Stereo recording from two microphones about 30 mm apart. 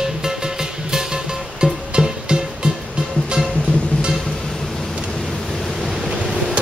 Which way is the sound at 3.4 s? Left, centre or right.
Centre.